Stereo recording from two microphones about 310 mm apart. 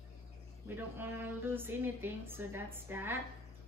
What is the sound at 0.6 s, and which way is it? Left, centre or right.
A woman's voice, centre.